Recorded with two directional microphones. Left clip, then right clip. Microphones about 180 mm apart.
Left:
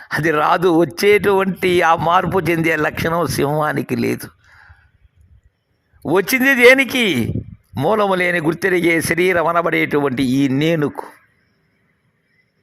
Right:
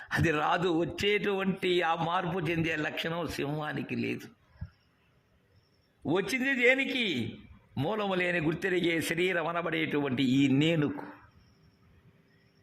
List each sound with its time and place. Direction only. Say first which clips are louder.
0.0 s speech: left 12 dB; 25° left (ahead or behind); by 4.1 s 45° left (ahead or behind)
6.0 s a man's voice: left 14 dB; 40° left (ahead or behind)